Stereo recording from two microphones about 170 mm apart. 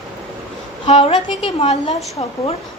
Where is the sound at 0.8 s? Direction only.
35° left (ahead or behind).